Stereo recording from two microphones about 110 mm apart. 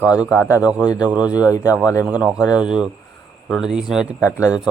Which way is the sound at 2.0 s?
10° right (ahead or behind).